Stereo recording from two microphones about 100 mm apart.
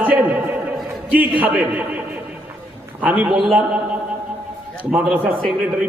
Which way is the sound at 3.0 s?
15° right (ahead or behind).